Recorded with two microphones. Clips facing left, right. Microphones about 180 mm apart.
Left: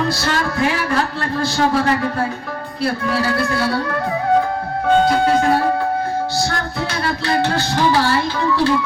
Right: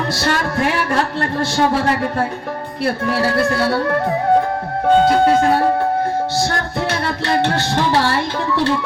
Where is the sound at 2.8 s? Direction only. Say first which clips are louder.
Right 1 dB; 60° right (ahead or behind).